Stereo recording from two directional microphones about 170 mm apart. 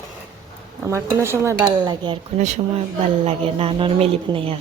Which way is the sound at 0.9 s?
15° right (ahead or behind).